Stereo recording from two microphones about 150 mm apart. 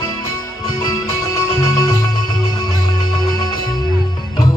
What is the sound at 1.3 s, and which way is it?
Music, 25° left (ahead or behind).